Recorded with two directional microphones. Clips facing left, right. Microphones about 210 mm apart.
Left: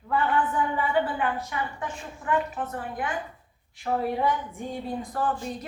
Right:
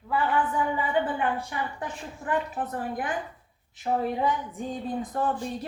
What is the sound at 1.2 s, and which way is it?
A woman's voice, 30° right (ahead or behind).